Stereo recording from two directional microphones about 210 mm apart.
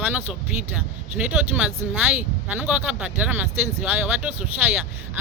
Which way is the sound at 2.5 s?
5° right (ahead or behind).